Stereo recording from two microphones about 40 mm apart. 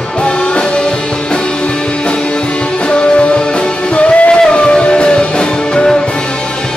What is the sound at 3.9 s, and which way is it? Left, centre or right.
Music, left.